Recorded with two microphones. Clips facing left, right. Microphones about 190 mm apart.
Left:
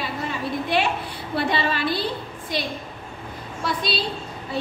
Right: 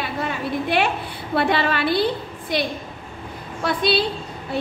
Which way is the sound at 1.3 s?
60° right (ahead or behind).